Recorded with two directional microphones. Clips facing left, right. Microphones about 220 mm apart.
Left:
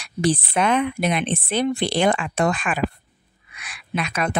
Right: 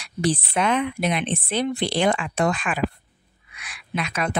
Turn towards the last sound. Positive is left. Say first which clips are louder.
# left 2 dB
turn(degrees=50)  # may be behind; listen again after turning